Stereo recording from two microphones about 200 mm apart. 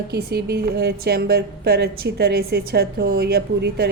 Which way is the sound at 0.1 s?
55° right (ahead or behind).